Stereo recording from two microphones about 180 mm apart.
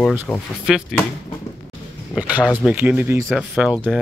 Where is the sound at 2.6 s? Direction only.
5° right (ahead or behind).